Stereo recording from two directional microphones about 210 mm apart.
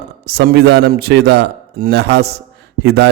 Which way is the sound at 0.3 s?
50° right (ahead or behind).